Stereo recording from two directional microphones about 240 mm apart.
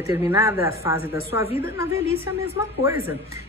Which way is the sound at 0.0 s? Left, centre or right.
Centre.